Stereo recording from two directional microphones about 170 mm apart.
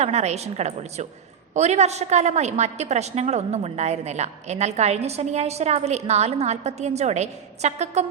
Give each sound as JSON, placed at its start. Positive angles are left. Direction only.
{"t": 0.0, "sound": "a woman's voice", "side_deg": -40}